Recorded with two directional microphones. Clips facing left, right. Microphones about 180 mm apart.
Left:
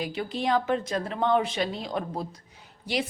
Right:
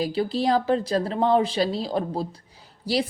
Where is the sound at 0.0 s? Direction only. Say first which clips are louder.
Right 6 dB; 35° right (ahead or behind).